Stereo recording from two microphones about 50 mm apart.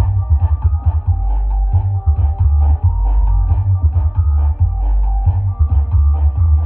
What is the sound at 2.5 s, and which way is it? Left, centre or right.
Music, centre.